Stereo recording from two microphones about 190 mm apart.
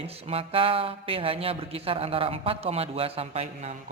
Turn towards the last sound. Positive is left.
turn(degrees=-35)  # may be behind; listen again after turning